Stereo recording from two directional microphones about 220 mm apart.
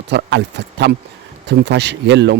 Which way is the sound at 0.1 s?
50° right (ahead or behind).